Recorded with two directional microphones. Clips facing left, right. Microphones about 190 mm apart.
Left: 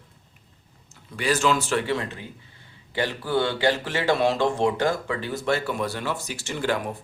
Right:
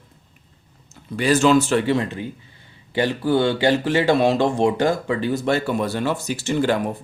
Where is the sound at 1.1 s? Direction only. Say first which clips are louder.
Right 7 dB; 25° right (ahead or behind).